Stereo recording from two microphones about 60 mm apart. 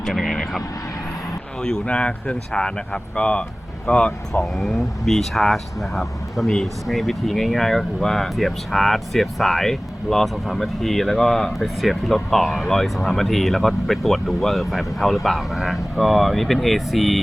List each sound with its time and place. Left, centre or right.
0.0 s vehicle: centre
1.6 s speech: centre
4.5 s speech: centre